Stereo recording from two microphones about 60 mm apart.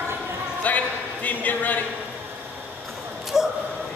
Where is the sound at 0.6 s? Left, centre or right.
Left.